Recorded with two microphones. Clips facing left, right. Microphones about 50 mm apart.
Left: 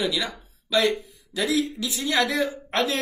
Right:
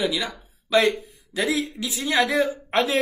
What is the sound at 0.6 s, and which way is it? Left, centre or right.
Speech, right.